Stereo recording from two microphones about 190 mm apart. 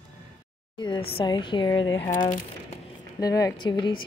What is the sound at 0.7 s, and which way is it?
A woman's voice, 25° left (ahead or behind).